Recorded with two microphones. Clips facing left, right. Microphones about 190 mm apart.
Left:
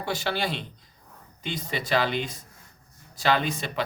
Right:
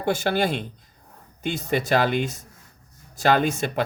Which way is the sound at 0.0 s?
50° right (ahead or behind).